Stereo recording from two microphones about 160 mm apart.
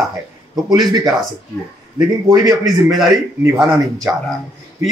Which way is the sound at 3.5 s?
20° right (ahead or behind).